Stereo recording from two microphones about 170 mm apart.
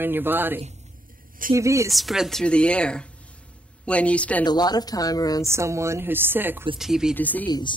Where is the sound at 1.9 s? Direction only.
Centre (ahead or behind).